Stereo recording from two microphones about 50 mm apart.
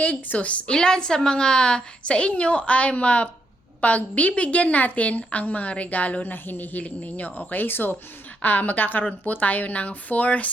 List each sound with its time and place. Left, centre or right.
0.0 s a woman's voice: left
0.7 s a woman's voice: centre
6.3 s a woman's voice: left